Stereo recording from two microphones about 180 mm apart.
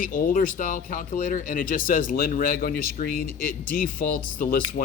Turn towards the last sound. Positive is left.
turn(degrees=50)  # may be behind; listen again after turning